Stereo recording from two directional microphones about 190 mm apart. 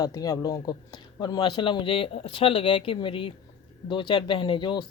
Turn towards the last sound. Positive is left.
turn(degrees=25)  # may be behind; listen again after turning